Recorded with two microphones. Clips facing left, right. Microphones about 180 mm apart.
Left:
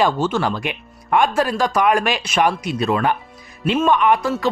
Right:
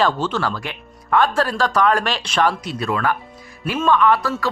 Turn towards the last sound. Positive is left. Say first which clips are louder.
# even
turn(degrees=20)  # may be behind; listen again after turning